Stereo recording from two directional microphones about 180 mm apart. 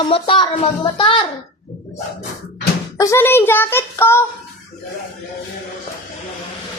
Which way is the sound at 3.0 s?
15° left (ahead or behind).